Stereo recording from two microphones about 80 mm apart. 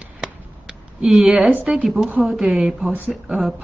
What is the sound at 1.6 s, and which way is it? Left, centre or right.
Speech, centre.